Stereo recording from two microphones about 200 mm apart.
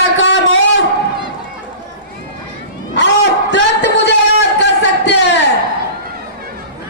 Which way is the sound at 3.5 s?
55° left (ahead or behind).